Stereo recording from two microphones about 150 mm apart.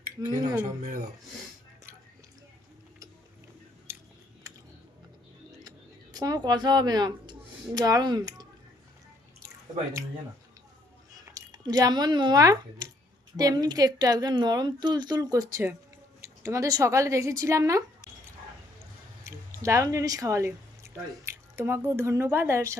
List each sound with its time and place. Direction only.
0.3 s a woman's voice: 30° right (ahead or behind)
4.4 s a sound: 20° right (ahead or behind)
6.1 s a woman's voice: 25° right (ahead or behind)
11.1 s a woman's voice: 25° right (ahead or behind)